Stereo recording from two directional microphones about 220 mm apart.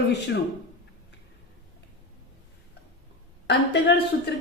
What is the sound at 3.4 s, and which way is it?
Speech, 50° left (ahead or behind).